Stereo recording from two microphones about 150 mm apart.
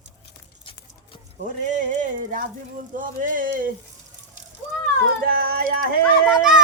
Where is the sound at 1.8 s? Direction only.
60° right (ahead or behind).